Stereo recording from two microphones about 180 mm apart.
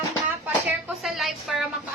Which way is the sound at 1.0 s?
Centre (ahead or behind).